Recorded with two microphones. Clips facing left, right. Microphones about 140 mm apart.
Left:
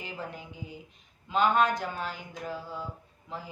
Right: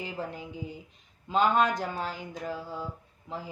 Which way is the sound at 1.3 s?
35° right (ahead or behind).